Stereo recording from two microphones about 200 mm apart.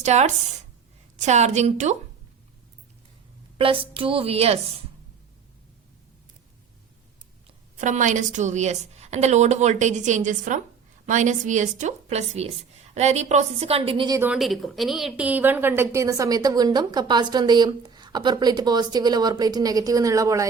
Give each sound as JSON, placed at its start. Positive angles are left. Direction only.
{"t": 0.0, "sound": "a woman's voice", "side_deg": -35}
{"t": 3.6, "sound": "speech", "side_deg": -25}
{"t": 7.8, "sound": "a woman's voice", "side_deg": -40}
{"t": 14.2, "sound": "a woman's voice", "side_deg": -5}